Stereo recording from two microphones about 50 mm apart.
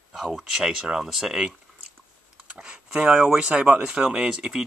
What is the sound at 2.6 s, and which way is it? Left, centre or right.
Speech, centre.